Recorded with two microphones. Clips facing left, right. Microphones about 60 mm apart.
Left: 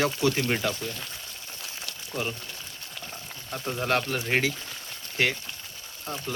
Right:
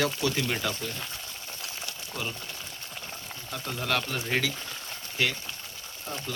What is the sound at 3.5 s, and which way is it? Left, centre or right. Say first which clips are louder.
Speech: left 3 dB; left.